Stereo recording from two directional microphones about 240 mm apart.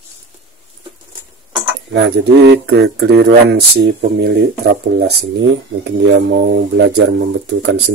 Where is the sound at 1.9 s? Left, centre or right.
Right.